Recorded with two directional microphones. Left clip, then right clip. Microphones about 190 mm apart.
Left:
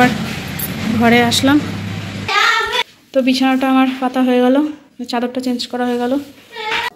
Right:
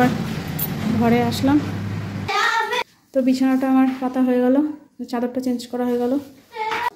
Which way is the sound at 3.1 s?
5° right (ahead or behind).